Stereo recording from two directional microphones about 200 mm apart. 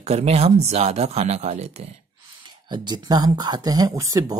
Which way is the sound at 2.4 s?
20° right (ahead or behind).